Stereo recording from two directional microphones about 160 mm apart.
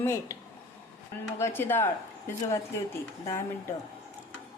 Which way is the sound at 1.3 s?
15° left (ahead or behind).